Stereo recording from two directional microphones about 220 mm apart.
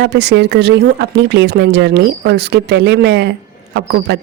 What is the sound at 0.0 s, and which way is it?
A woman's voice, 50° right (ahead or behind).